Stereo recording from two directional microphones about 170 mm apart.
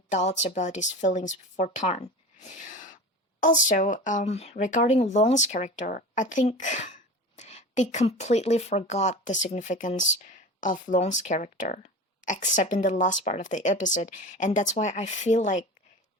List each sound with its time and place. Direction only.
0.1 s speech: 40° left (ahead or behind)